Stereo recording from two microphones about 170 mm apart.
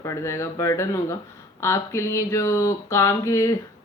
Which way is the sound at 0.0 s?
15° left (ahead or behind).